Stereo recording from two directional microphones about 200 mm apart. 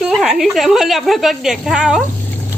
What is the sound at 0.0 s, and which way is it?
A woman's voice, centre (ahead or behind).